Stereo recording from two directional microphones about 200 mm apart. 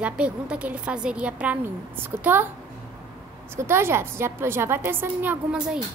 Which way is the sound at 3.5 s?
10° right (ahead or behind).